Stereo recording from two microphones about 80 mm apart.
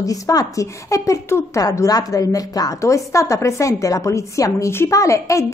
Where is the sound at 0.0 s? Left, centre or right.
Left.